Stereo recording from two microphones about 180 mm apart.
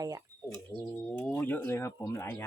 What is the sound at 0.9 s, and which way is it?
Speech, 10° left (ahead or behind).